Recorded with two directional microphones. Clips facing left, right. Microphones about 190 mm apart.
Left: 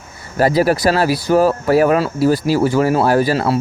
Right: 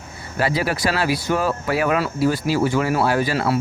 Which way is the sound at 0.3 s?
40° left (ahead or behind).